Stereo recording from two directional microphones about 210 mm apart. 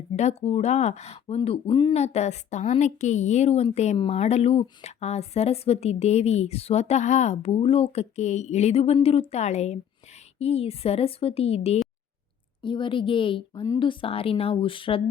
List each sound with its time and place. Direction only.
0.1 s a woman's voice: 30° left (ahead or behind)
1.4 s a woman's voice: 20° left (ahead or behind)